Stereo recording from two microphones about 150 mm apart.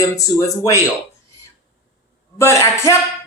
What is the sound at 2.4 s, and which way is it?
Speech, 20° left (ahead or behind).